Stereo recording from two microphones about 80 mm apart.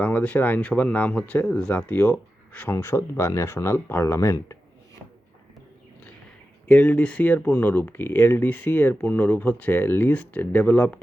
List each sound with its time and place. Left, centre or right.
0.0 s speech: left
2.7 s speech: left
6.7 s speech: left